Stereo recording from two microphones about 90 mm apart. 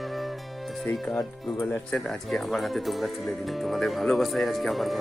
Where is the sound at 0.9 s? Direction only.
20° left (ahead or behind).